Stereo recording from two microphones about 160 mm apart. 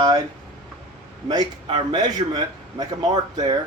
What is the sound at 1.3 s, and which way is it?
A man's voice, 30° right (ahead or behind).